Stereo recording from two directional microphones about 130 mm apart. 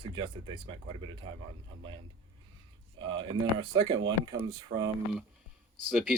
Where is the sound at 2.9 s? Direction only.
35° right (ahead or behind).